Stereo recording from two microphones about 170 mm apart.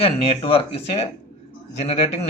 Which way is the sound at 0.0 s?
35° left (ahead or behind).